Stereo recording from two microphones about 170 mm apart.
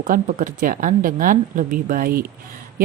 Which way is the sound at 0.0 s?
50° right (ahead or behind).